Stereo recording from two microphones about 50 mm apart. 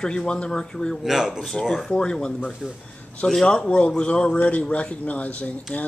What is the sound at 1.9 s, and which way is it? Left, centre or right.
A man's voice, centre.